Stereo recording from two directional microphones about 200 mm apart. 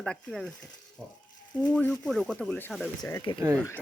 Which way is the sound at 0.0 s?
5° left (ahead or behind).